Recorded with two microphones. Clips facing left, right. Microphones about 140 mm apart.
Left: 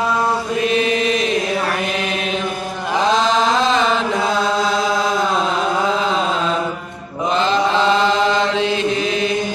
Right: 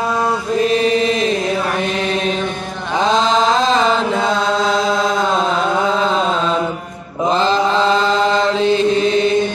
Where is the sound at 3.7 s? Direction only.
35° right (ahead or behind).